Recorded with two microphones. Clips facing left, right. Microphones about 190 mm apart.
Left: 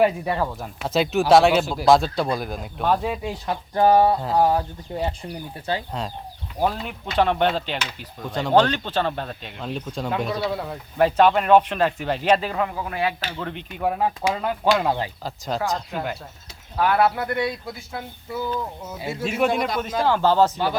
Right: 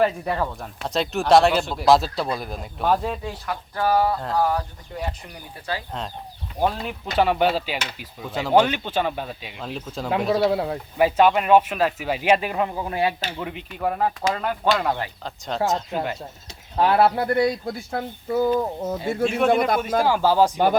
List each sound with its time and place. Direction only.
0.0 s speech: 5° left (ahead or behind)
3.2 s speech: 25° left (ahead or behind)
6.6 s speech: centre (ahead or behind)
10.4 s speech: 25° right (ahead or behind)
10.9 s speech: 5° right (ahead or behind); by 13.1 s 25° right (ahead or behind)
13.4 s speech: 5° right (ahead or behind); by 15.1 s 15° left (ahead or behind)
15.2 s speech: 5° left (ahead or behind)
16.7 s speech: 30° right (ahead or behind)
17.7 s speech: 50° right (ahead or behind)
19.0 s speech: 5° left (ahead or behind)
19.5 s a man's voice: 55° right (ahead or behind)
20.0 s speech: 10° right (ahead or behind)